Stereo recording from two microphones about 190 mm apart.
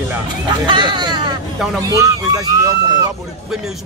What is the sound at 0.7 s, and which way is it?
Speech, 25° right (ahead or behind).